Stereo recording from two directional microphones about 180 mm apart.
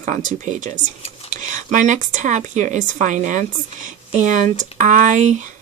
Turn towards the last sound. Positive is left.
turn(degrees=-45)  # may be behind; listen again after turning